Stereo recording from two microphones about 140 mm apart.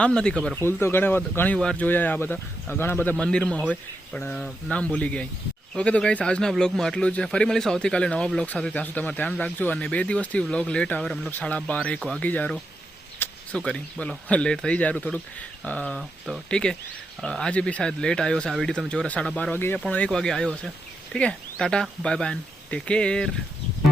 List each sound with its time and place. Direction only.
0.0 s speech: 5° left (ahead or behind)
0.5 s speech: 15° left (ahead or behind)
13.1 s a sound: 15° left (ahead or behind)
13.7 s speech: 5° left (ahead or behind)